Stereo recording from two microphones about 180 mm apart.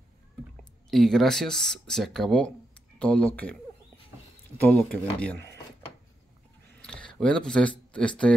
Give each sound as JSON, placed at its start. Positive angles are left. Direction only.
{"t": 0.8, "sound": "speech", "side_deg": 0}
{"t": 4.6, "sound": "speech", "side_deg": 10}
{"t": 6.7, "sound": "a sound", "side_deg": 5}
{"t": 7.9, "sound": "speech", "side_deg": 5}